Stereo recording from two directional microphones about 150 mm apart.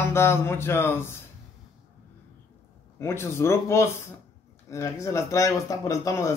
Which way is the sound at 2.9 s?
15° left (ahead or behind).